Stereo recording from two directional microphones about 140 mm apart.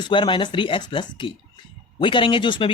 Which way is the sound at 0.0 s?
35° left (ahead or behind).